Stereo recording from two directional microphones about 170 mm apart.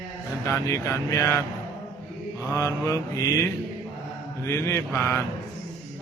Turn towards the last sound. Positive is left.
turn(degrees=15)  # may be behind; listen again after turning